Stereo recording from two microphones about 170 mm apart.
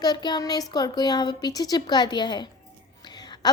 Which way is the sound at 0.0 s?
25° left (ahead or behind).